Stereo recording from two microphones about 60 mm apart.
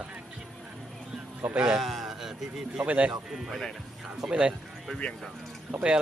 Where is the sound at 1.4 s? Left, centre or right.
Centre.